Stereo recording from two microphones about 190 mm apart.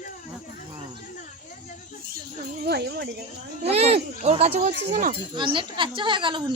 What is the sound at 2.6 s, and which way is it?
Speech, 60° right (ahead or behind).